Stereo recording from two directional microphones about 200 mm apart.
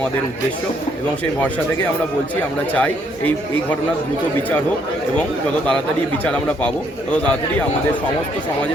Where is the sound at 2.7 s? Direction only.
5° left (ahead or behind).